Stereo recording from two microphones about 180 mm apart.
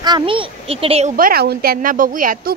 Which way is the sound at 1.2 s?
60° right (ahead or behind).